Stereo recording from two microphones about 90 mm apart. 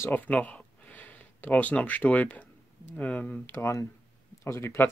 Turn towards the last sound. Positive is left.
turn(degrees=30)  # may be behind; listen again after turning